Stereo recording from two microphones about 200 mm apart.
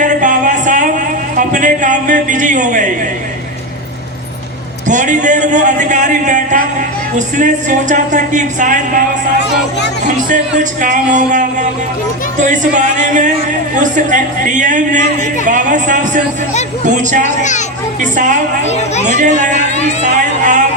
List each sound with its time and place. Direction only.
0.0 s a sound: 40° right (ahead or behind)
1.4 s a woman's voice: 40° right (ahead or behind)
4.9 s a woman's voice: 40° right (ahead or behind)
9.4 s speech: 60° left (ahead or behind)
10.2 s a woman's voice: 40° right (ahead or behind)
17.4 s speech: 35° left (ahead or behind)
18.0 s a woman's voice: 40° right (ahead or behind)
18.6 s speech: 35° left (ahead or behind)
19.4 s a woman's voice: 40° right (ahead or behind)